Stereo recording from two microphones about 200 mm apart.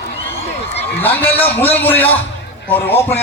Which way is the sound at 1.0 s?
10° left (ahead or behind).